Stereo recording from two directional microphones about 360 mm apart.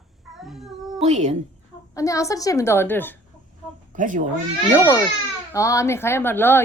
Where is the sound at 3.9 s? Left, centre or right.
Right.